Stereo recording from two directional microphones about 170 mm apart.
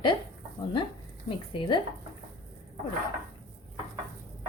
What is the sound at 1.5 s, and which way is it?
Speech, 30° left (ahead or behind).